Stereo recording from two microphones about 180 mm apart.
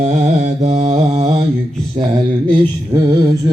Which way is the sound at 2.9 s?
20° right (ahead or behind).